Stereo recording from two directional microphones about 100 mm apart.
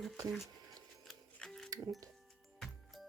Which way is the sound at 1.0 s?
5° left (ahead or behind).